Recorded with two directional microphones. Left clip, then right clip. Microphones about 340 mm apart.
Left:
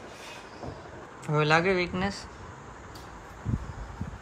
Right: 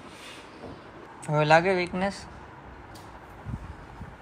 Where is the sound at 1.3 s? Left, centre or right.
Centre.